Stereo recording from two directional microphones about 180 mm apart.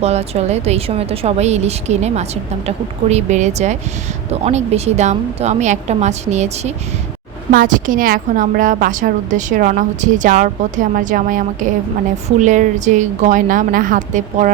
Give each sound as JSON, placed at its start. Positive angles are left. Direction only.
{"t": 0.0, "sound": "a woman's voice", "side_deg": -35}
{"t": 7.5, "sound": "a woman's voice", "side_deg": -50}